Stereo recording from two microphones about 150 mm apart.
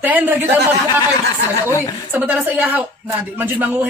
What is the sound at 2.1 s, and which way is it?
Speech, 10° right (ahead or behind).